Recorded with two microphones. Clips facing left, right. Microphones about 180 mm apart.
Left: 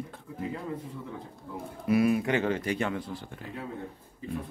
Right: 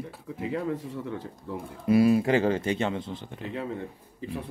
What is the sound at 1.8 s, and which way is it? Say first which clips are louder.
Speech: right 4 dB; 30° right (ahead or behind).